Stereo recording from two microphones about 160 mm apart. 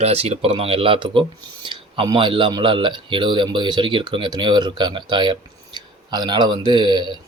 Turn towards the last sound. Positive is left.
turn(degrees=-30)  # may be behind; listen again after turning